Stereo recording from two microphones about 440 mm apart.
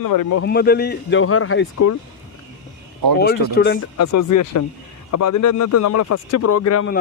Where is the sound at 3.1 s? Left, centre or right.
Left.